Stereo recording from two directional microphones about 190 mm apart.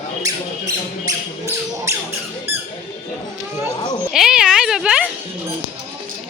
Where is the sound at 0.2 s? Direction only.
20° right (ahead or behind).